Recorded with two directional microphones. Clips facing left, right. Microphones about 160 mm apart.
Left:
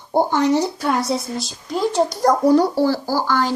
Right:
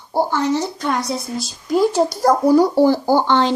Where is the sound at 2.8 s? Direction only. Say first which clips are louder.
Right 5 dB; 20° right (ahead or behind).